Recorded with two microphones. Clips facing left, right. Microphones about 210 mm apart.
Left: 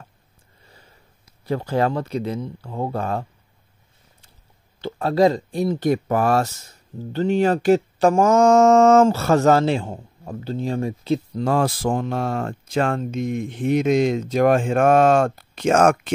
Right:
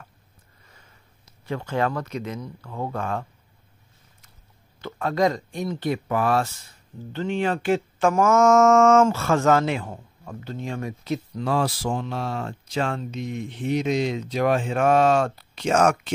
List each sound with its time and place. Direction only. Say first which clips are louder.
0.7 s a sound: left 5 dB; 30° left (ahead or behind)
1.4 s speech: left 4 dB; 35° left (ahead or behind)
4.8 s speech: left 5 dB; 35° left (ahead or behind)
11.4 s speech: left 3 dB; 50° left (ahead or behind)